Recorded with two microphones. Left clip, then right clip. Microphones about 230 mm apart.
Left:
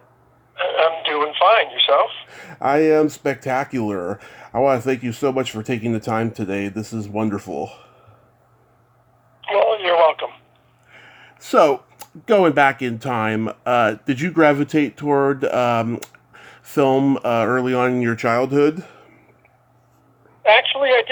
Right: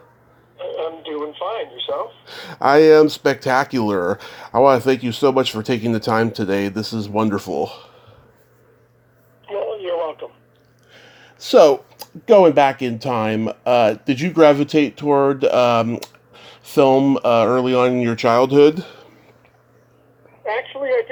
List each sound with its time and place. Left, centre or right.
0.5 s a woman's voice: left
2.2 s speech: centre
9.5 s telephone: left
10.9 s speech: centre
20.4 s a woman's voice: left